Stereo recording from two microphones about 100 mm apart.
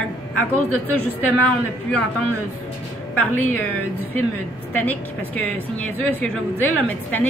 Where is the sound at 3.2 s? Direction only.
20° left (ahead or behind).